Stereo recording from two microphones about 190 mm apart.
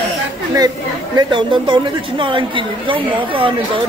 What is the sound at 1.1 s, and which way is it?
A woman's voice, 25° right (ahead or behind).